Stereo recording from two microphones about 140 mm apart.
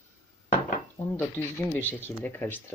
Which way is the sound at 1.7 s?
15° left (ahead or behind).